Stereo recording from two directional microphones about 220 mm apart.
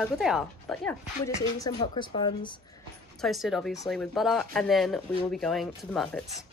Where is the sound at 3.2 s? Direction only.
Centre (ahead or behind).